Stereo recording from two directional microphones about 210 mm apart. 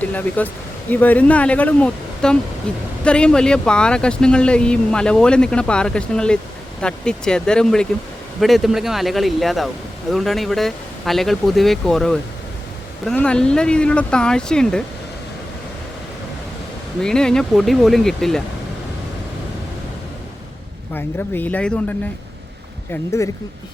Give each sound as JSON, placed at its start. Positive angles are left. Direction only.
{"t": 0.0, "sound": "speech", "side_deg": 5}
{"t": 17.0, "sound": "speech", "side_deg": 5}
{"t": 20.9, "sound": "speech", "side_deg": 10}